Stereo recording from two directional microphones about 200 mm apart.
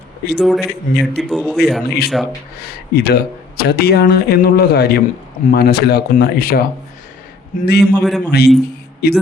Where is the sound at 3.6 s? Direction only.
50° left (ahead or behind).